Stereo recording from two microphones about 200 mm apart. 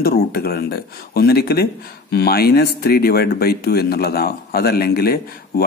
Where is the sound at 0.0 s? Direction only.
50° left (ahead or behind).